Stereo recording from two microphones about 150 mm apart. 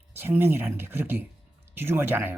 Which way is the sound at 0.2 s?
15° right (ahead or behind).